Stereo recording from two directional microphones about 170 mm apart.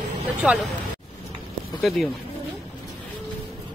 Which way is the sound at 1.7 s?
Centre (ahead or behind).